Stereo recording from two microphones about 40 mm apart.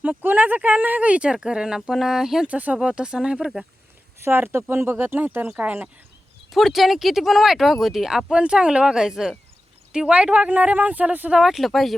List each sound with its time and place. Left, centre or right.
0.0 s speech: right
1.3 s speech: right
2.5 s speech: right
2.7 s speech: right
4.2 s speech: right
4.7 s speech: right
5.5 s speech: right
6.5 s speech: centre
8.3 s speech: right
9.9 s speech: right
11.3 s speech: centre